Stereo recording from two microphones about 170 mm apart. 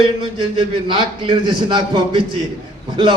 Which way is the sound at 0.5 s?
30° right (ahead or behind).